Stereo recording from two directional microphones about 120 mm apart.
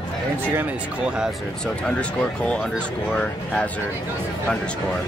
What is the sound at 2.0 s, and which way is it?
Speech, 10° left (ahead or behind).